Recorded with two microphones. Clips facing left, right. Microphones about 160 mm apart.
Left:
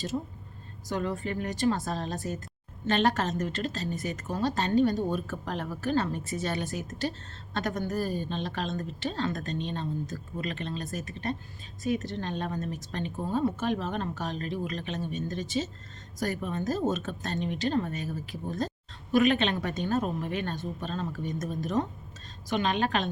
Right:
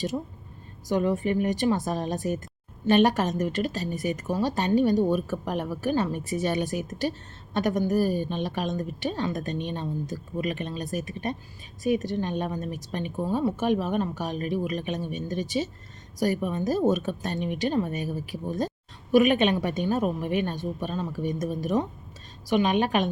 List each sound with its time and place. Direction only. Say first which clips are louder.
0.9 s a woman's voice: right 7 dB; 15° right (ahead or behind)